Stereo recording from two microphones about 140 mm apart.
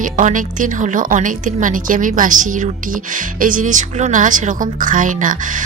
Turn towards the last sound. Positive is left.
turn(degrees=-65)  # may be behind; listen again after turning